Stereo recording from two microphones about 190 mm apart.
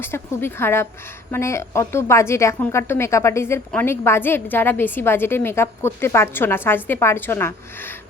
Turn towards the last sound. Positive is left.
turn(degrees=10)  # may be behind; listen again after turning